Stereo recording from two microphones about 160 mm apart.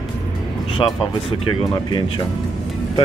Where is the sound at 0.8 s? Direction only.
25° left (ahead or behind).